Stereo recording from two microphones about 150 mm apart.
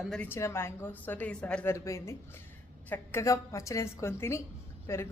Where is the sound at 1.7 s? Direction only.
20° left (ahead or behind).